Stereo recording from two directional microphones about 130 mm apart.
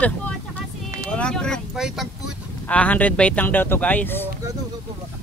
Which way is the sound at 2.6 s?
10° left (ahead or behind).